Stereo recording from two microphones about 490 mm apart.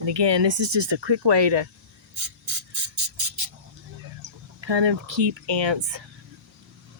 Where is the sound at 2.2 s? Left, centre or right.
Right.